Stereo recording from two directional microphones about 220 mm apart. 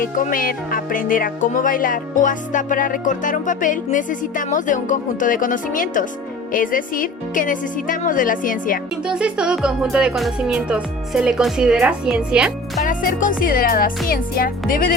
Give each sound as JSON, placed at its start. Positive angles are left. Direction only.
{"t": 0.0, "sound": "speech", "side_deg": 40}
{"t": 9.0, "sound": "music", "side_deg": -5}
{"t": 12.8, "sound": "speech", "side_deg": 35}